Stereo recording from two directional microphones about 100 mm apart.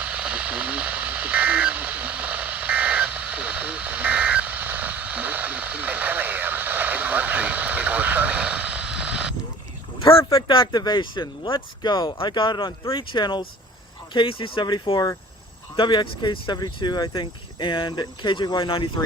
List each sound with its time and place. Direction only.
0.0 s a sound: 15° right (ahead or behind)
10.5 s speech: 50° left (ahead or behind)
12.1 s speech: 55° left (ahead or behind)